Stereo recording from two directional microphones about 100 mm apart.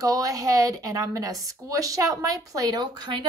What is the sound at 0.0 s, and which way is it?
A woman's voice, 35° right (ahead or behind).